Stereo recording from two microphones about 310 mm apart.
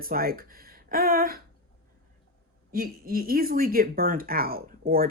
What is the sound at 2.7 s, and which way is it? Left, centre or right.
Speech, right.